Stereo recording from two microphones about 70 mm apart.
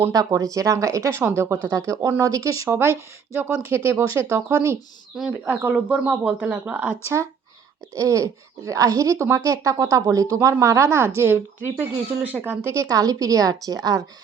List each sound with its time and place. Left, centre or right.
0.1 s speech: right
2.6 s speech: right
5.3 s speech: centre
7.0 s speech: right
11.8 s speech: right
12.6 s a woman's voice: right